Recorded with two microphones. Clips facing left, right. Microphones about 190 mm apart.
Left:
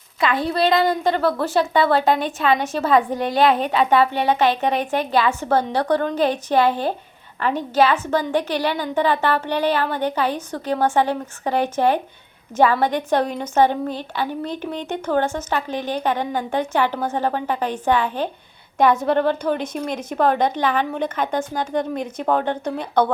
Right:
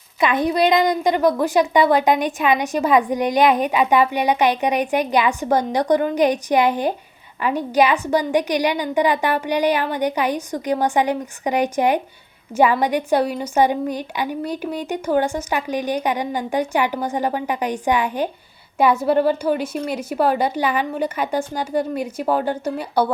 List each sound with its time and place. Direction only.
0.2 s a woman's voice: 20° right (ahead or behind)